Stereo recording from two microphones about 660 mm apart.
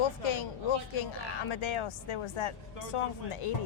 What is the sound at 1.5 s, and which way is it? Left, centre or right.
Speech, left.